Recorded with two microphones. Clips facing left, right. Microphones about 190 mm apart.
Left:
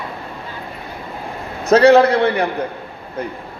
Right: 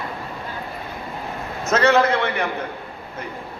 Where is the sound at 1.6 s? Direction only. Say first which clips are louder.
Left 7 dB; 35° left (ahead or behind).